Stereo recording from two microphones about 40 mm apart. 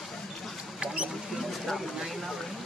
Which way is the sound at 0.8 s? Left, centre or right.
Right.